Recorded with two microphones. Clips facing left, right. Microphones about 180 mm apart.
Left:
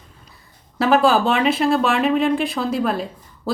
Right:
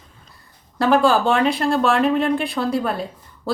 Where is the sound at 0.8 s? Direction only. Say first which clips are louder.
Even; 5° left (ahead or behind).